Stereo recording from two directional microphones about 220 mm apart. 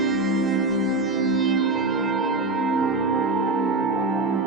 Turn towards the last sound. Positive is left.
turn(degrees=0)  # may be behind; listen again after turning